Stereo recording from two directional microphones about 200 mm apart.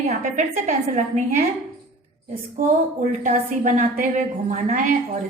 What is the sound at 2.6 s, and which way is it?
A woman's voice, 40° right (ahead or behind).